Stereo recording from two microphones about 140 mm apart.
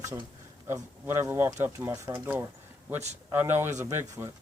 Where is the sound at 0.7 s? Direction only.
20° right (ahead or behind).